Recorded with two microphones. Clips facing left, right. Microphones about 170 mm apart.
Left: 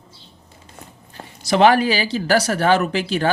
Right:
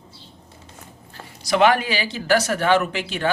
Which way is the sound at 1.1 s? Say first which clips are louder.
Left 2 dB; 25° left (ahead or behind).